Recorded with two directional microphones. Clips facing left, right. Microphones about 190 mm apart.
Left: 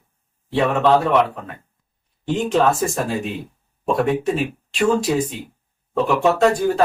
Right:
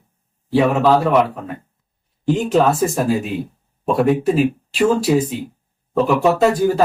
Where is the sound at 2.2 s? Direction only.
Centre (ahead or behind).